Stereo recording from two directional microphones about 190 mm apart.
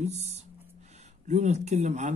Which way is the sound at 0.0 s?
35° right (ahead or behind).